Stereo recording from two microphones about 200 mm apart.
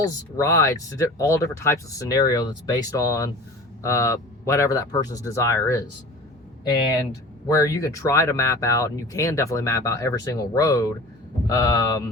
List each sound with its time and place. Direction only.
0.3 s speech: 15° left (ahead or behind)
7.1 s speech: 15° left (ahead or behind)